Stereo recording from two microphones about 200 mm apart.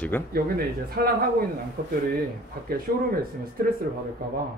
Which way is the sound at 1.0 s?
50° right (ahead or behind).